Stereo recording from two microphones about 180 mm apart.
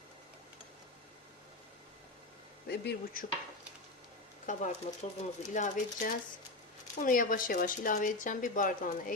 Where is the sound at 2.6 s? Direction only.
60° left (ahead or behind).